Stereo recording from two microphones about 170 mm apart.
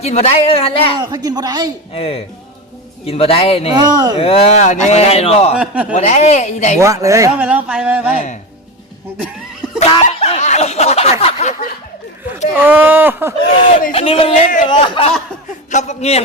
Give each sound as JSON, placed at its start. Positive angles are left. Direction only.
{"t": 0.0, "sound": "a woman's voice", "side_deg": 40}
{"t": 0.9, "sound": "speech", "side_deg": -25}
{"t": 1.9, "sound": "a woman's voice", "side_deg": 35}
{"t": 3.8, "sound": "speech", "side_deg": -25}
{"t": 4.2, "sound": "a woman's voice", "side_deg": 35}
{"t": 5.5, "sound": "speech", "side_deg": -5}
{"t": 5.9, "sound": "speech", "side_deg": 40}
{"t": 6.7, "sound": "speech", "side_deg": -20}
{"t": 7.4, "sound": "speech", "side_deg": -5}
{"t": 9.8, "sound": "snicker", "side_deg": 35}
{"t": 11.2, "sound": "a sound", "side_deg": 40}
{"t": 12.5, "sound": "speech", "side_deg": -10}
{"t": 13.9, "sound": "a woman's voice", "side_deg": 35}
{"t": 15.7, "sound": "a woman's voice", "side_deg": 40}